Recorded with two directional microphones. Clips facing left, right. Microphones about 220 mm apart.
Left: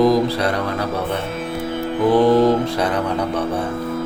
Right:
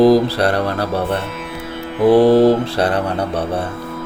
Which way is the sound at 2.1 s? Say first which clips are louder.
Right 3 dB; 30° right (ahead or behind).